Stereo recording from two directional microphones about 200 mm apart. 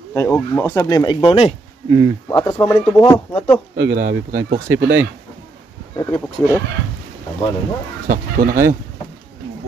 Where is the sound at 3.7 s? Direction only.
50° right (ahead or behind).